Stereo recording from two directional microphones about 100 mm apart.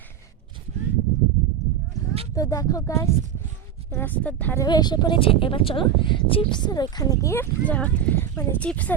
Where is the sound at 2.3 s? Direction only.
35° left (ahead or behind).